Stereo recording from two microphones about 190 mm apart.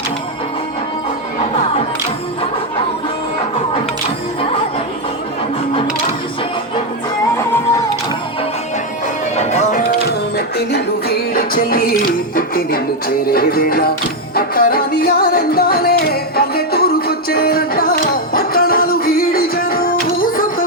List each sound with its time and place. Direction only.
7.5 s a sound: 15° left (ahead or behind)
9.3 s music: 35° left (ahead or behind)
10.3 s music: 60° left (ahead or behind)